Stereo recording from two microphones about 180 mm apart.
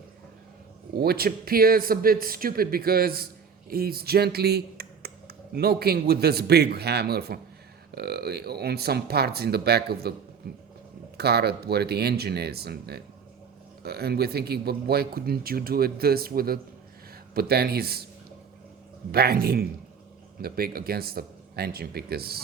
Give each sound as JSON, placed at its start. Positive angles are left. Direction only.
{"t": 0.9, "sound": "speech", "side_deg": -60}
{"t": 11.2, "sound": "speech", "side_deg": -65}
{"t": 19.1, "sound": "speech", "side_deg": -60}